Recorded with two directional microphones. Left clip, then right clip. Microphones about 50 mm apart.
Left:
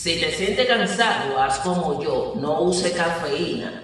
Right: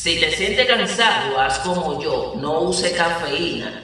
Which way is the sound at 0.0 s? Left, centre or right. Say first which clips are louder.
Right 4 dB; left.